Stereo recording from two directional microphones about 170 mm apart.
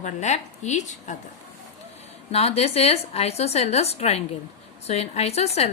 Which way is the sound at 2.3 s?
35° left (ahead or behind).